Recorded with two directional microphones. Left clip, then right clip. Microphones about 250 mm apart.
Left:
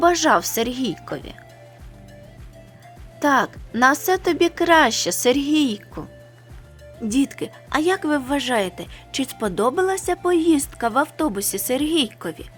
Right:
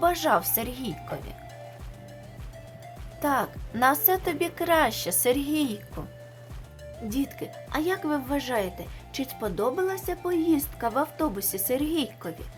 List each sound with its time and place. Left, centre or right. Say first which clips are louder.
0.0 s a woman's voice: left 7 dB; left
3.2 s a woman's voice: left 8 dB; left
7.1 s a woman's voice: left 9 dB; left